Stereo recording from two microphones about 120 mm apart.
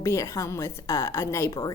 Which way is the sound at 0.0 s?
25° left (ahead or behind).